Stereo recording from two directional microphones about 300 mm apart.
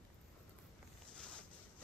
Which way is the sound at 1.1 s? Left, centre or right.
Centre.